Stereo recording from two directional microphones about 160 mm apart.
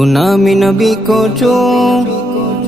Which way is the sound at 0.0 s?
Centre (ahead or behind).